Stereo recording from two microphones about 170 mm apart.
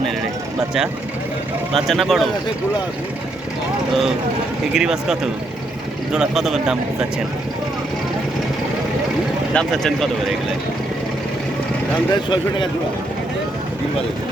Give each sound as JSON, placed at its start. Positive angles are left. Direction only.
{"t": 1.7, "sound": "speech", "side_deg": 0}
{"t": 4.7, "sound": "speech", "side_deg": -5}
{"t": 9.5, "sound": "speech", "side_deg": 5}
{"t": 12.1, "sound": "speech", "side_deg": 30}